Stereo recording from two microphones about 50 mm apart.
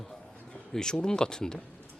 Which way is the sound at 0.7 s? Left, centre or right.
Centre.